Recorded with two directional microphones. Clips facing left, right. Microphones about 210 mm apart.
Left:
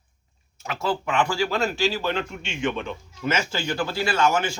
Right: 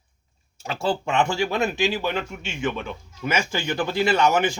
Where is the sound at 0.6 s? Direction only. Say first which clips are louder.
Right 2 dB; 30° right (ahead or behind).